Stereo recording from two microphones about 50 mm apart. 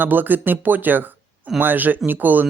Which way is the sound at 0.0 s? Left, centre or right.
Right.